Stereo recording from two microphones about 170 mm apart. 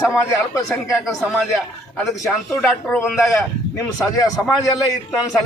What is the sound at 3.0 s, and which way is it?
Speech, centre (ahead or behind).